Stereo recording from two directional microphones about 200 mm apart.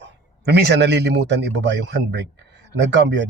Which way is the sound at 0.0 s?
60° right (ahead or behind).